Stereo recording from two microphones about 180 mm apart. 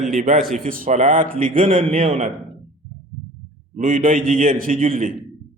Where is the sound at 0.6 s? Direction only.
50° right (ahead or behind).